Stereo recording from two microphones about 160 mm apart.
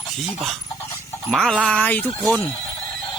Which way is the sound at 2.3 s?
5° left (ahead or behind).